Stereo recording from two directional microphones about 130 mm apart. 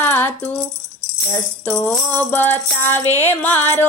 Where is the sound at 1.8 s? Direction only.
10° left (ahead or behind).